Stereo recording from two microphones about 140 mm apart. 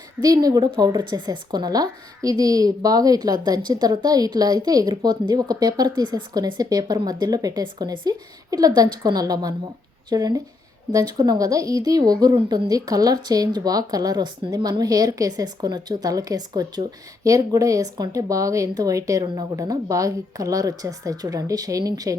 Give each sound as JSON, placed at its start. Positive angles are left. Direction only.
{"t": 0.2, "sound": "a woman's voice", "side_deg": -25}